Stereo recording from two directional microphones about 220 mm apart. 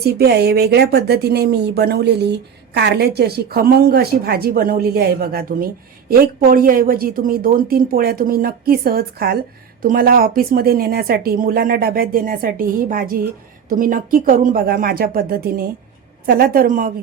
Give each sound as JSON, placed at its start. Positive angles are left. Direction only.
{"t": 0.0, "sound": "a woman's voice", "side_deg": -45}